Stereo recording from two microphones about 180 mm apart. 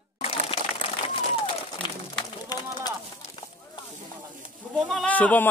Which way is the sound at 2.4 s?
20° left (ahead or behind).